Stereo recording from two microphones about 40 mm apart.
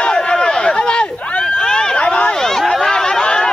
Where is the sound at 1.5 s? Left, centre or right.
Centre.